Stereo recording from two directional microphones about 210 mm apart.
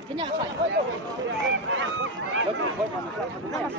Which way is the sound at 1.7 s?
60° right (ahead or behind).